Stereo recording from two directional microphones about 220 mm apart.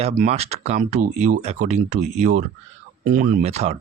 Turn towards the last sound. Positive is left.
turn(degrees=-30)  # may be behind; listen again after turning